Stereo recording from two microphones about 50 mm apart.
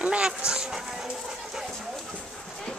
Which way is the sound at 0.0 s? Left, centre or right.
Right.